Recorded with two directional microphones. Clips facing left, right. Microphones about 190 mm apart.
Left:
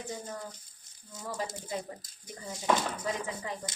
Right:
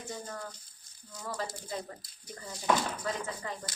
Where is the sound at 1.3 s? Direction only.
20° left (ahead or behind).